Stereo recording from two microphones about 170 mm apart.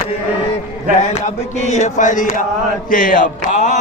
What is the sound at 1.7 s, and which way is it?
Chant, 45° left (ahead or behind).